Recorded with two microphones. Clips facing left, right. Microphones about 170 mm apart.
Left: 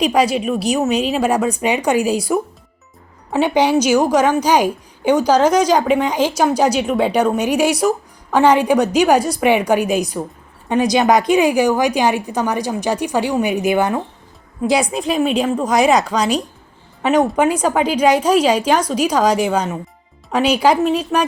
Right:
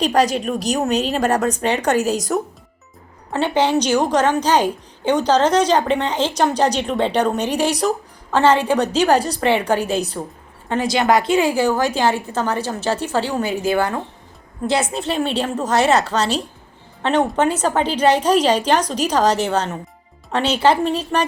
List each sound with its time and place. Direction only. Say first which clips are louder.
0.0 s a woman's voice: left 2 dB; 10° left (ahead or behind)